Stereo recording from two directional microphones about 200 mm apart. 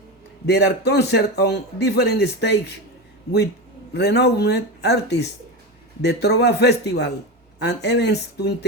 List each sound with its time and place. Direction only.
0.4 s a man's voice: 55° left (ahead or behind)
3.9 s a man's voice: 55° left (ahead or behind)